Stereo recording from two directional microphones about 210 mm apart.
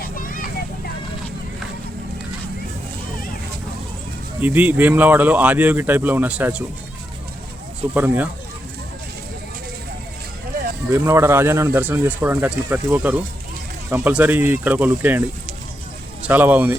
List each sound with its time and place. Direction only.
0.0 s vehicle: 40° left (ahead or behind)
4.4 s speech: 10° right (ahead or behind)
7.9 s speech: 10° right (ahead or behind)
10.8 s speech: 10° right (ahead or behind)
16.2 s speech: 10° right (ahead or behind)